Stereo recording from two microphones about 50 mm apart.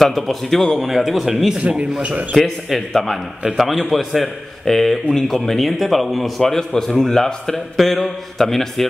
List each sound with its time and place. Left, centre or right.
0.0 s speech: centre
1.6 s a man's voice: right
2.3 s speech: centre
6.4 s a man's voice: centre